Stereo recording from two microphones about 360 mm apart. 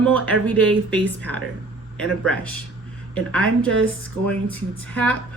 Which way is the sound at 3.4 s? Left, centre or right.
Right.